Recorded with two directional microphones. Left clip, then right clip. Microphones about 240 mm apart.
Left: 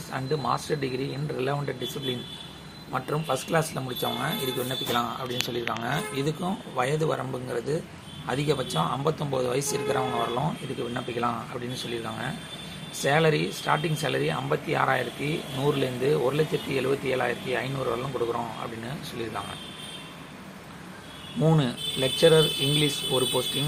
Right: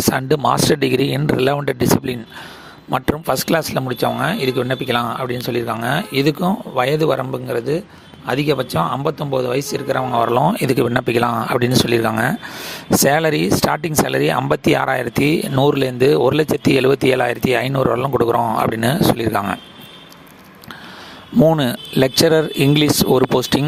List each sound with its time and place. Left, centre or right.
0.1 s speech: right
10.9 s speech: right
21.4 s speech: right